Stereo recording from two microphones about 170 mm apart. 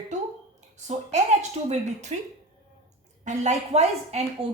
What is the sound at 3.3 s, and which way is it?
Speech, 45° right (ahead or behind).